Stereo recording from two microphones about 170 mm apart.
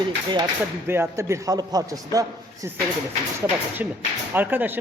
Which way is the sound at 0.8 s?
15° right (ahead or behind).